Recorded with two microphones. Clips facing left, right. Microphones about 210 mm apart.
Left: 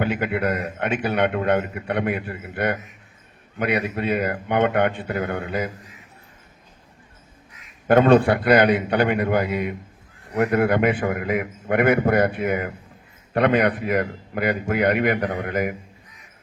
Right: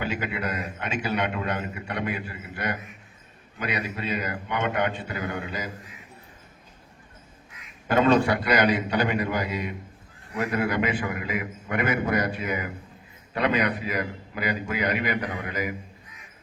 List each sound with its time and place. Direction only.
0.0 s a man's voice: 55° left (ahead or behind)
7.9 s a man's voice: 55° left (ahead or behind)